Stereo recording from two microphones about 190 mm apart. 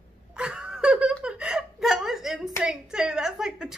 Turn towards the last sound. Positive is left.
turn(degrees=-5)  # may be behind; listen again after turning